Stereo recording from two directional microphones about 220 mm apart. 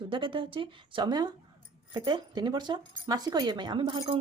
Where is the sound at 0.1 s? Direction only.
20° right (ahead or behind).